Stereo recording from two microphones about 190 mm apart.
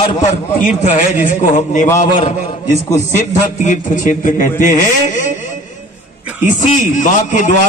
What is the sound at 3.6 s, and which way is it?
A man's voice, 40° left (ahead or behind).